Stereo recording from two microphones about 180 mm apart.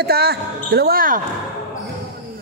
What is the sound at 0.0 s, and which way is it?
Speech, 60° right (ahead or behind).